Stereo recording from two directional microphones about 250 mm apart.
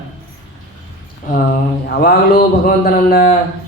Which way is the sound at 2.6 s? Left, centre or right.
Left.